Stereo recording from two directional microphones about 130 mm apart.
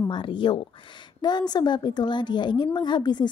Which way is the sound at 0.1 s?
40° left (ahead or behind).